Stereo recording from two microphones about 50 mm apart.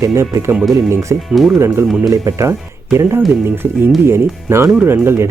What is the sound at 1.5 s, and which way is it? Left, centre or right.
Speech, right.